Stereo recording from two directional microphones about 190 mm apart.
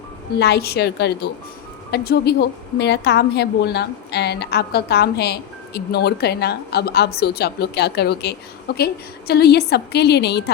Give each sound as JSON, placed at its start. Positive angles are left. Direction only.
{"t": 0.3, "sound": "a woman's voice", "side_deg": 60}